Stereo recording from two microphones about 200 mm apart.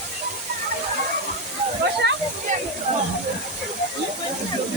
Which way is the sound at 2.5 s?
35° right (ahead or behind).